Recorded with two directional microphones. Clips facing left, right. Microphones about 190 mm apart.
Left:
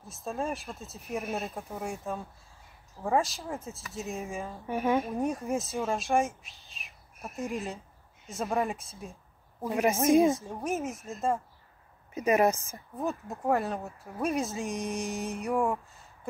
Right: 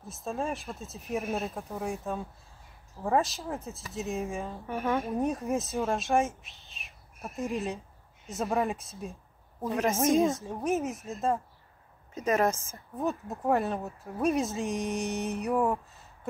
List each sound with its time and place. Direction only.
0.0 s speech: centre (ahead or behind)
4.6 s a woman's voice: 10° left (ahead or behind)
5.0 s speech: centre (ahead or behind)
9.6 s a woman's voice: 10° left (ahead or behind)
10.3 s speech: centre (ahead or behind)
12.1 s speech: 10° left (ahead or behind)
13.3 s speech: centre (ahead or behind)